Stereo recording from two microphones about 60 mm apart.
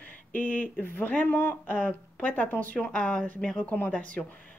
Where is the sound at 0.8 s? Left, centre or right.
Left.